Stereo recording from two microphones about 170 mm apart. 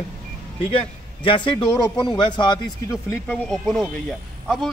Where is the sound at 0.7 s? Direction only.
30° left (ahead or behind).